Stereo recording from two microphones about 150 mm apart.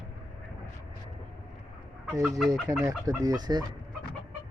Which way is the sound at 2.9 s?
25° right (ahead or behind).